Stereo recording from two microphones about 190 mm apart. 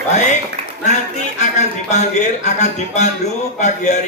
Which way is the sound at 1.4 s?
35° left (ahead or behind).